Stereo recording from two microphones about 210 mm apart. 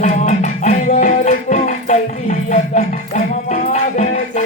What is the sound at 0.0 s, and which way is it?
Music, 35° left (ahead or behind).